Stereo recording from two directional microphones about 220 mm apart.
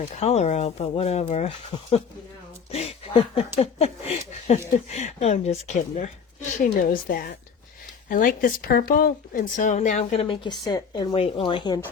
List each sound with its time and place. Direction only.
0.2 s speech: 30° left (ahead or behind)